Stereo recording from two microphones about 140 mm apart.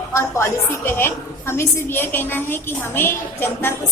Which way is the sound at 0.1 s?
20° left (ahead or behind).